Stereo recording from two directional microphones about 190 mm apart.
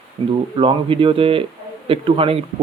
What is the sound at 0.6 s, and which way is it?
Speech, 30° right (ahead or behind).